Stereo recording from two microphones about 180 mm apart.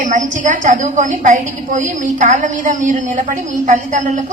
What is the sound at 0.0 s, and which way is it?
A woman's voice, 45° right (ahead or behind).